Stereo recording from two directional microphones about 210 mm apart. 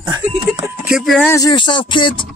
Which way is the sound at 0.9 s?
Centre (ahead or behind).